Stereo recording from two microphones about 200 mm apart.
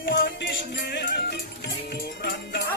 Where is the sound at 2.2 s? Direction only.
60° left (ahead or behind).